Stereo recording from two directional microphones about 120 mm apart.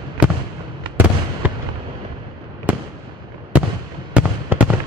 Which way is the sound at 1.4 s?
15° right (ahead or behind).